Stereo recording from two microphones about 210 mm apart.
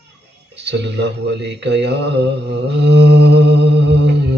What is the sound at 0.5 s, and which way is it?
Mantra, 55° right (ahead or behind).